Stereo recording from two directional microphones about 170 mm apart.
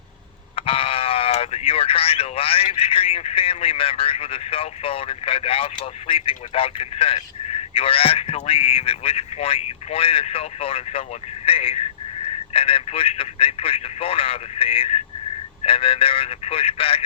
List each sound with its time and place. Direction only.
0.5 s speech: 35° left (ahead or behind)